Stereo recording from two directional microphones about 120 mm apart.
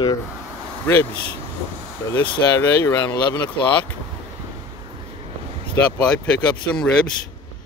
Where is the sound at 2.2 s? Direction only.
30° left (ahead or behind).